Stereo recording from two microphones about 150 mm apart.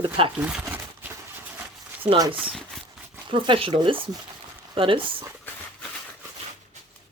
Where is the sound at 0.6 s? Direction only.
15° right (ahead or behind).